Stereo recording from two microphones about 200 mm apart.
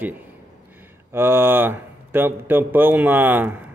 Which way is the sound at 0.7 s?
10° right (ahead or behind).